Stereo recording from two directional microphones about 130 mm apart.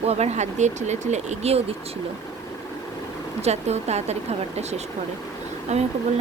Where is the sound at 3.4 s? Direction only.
55° right (ahead or behind).